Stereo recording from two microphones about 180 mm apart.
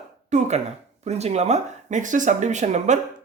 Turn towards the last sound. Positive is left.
turn(degrees=-40)  # may be behind; listen again after turning